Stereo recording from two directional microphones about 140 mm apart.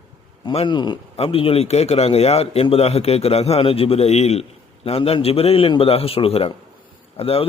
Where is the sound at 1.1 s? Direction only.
45° left (ahead or behind).